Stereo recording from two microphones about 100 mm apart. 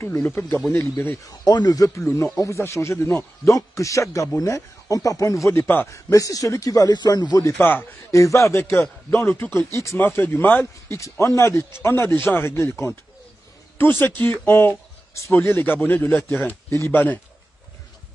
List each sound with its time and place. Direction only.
0.0 s speech: 25° left (ahead or behind)
1.2 s speech: 45° left (ahead or behind)
7.4 s speech: 20° left (ahead or behind)
8.1 s speech: 30° left (ahead or behind)